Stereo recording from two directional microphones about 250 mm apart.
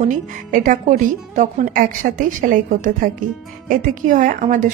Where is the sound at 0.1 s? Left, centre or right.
Right.